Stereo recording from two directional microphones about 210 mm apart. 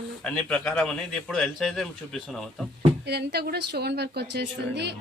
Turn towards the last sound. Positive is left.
turn(degrees=-55)  # may be behind; listen again after turning